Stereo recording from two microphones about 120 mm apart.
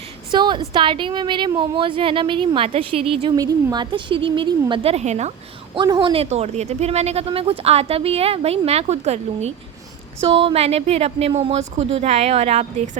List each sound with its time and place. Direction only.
0.3 s a woman's voice: 40° right (ahead or behind)
3.3 s a woman's voice: 35° right (ahead or behind); by 5.3 s 65° right (ahead or behind)
5.7 s a woman's voice: 40° right (ahead or behind)
6.3 s speech: 65° right (ahead or behind)
10.2 s speech: 55° right (ahead or behind); by 13.0 s 75° right (ahead or behind)